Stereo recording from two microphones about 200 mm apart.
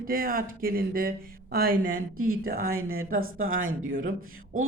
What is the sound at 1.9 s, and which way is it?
Speech, 90° right.